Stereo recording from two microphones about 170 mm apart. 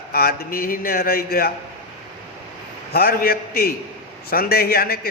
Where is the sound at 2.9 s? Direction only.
65° left (ahead or behind).